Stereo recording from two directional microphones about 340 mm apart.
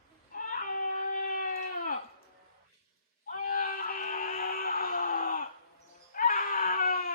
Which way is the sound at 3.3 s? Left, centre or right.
Left.